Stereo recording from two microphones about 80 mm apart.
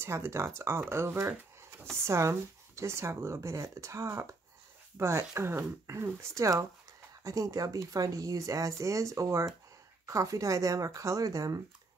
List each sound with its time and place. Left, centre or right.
0.0 s speech: right